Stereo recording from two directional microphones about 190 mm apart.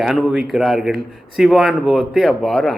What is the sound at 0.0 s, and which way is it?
A man's voice, centre (ahead or behind).